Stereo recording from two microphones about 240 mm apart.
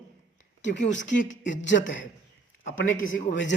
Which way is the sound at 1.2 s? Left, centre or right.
Left.